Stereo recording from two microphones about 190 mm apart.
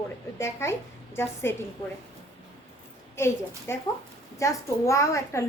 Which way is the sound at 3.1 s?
15° left (ahead or behind).